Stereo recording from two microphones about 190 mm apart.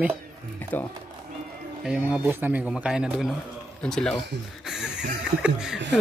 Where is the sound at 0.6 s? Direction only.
10° left (ahead or behind).